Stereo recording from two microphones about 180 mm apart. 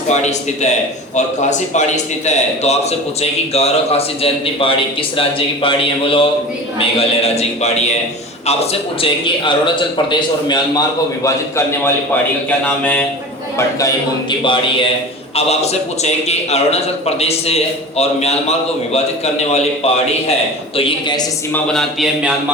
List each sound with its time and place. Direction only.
0.1 s a man's voice: 40° left (ahead or behind)
9.0 s a man's voice: 25° left (ahead or behind); by 13.1 s 5° left (ahead or behind)
13.6 s a man's voice: 20° left (ahead or behind)
21.5 s speech: centre (ahead or behind)